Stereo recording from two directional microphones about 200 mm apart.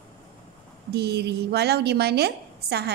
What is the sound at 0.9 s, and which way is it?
A woman's voice, 55° right (ahead or behind).